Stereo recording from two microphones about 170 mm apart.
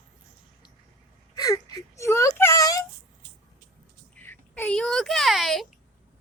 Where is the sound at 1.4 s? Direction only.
20° left (ahead or behind).